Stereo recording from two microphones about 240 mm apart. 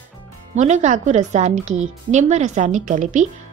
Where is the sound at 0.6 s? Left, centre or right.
Right.